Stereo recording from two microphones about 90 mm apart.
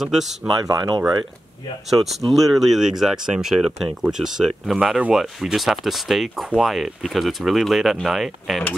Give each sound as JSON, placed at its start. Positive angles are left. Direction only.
{"t": 0.0, "sound": "speech", "side_deg": -5}
{"t": 0.7, "sound": "speech", "side_deg": -55}
{"t": 1.9, "sound": "speech", "side_deg": 0}